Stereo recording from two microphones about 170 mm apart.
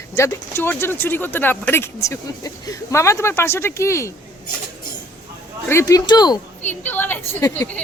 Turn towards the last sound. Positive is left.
turn(degrees=15)  # may be behind; listen again after turning